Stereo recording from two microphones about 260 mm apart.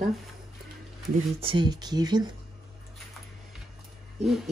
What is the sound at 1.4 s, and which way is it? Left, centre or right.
Speech, centre.